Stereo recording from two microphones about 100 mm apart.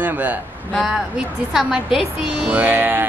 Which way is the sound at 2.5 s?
20° right (ahead or behind).